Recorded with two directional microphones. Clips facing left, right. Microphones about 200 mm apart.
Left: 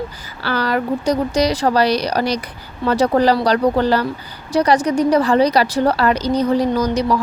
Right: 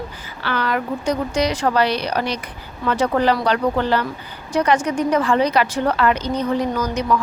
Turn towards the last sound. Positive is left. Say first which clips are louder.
# left 3 dB
turn(degrees=35)  # may be behind; listen again after turning